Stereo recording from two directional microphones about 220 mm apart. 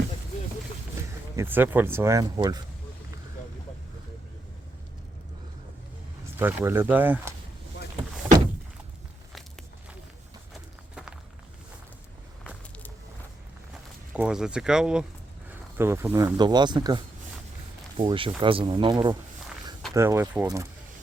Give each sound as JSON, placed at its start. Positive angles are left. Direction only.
{"t": 1.4, "sound": "speech", "side_deg": -10}
{"t": 6.4, "sound": "speech", "side_deg": -10}
{"t": 14.1, "sound": "speech", "side_deg": -5}